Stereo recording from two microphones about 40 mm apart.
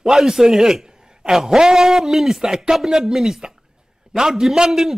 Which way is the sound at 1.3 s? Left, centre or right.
Centre.